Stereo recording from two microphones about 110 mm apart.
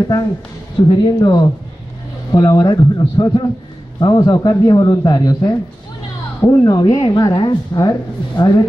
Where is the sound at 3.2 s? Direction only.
45° left (ahead or behind).